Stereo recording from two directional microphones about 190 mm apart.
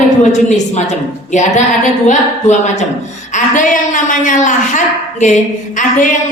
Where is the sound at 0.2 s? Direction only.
40° left (ahead or behind).